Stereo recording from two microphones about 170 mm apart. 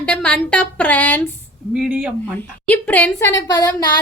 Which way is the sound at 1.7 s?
5° right (ahead or behind).